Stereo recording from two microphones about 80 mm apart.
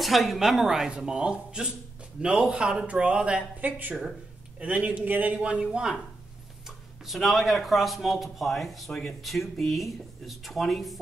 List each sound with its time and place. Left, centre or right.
0.0 s a man's voice: centre
3.6 s a man's voice: right
7.1 s speech: centre